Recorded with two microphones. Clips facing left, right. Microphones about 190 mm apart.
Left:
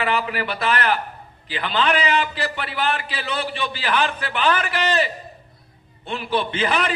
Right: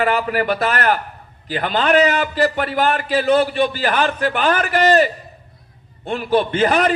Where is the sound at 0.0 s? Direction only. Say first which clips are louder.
Right 5 dB; 45° right (ahead or behind).